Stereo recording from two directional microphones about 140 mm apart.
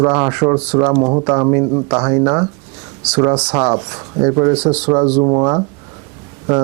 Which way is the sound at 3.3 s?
10° right (ahead or behind).